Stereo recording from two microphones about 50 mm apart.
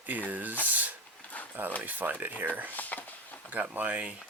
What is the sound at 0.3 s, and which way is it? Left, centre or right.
Speech, right.